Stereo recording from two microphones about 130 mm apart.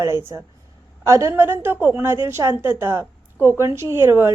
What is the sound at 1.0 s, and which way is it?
A woman's voice, 20° right (ahead or behind).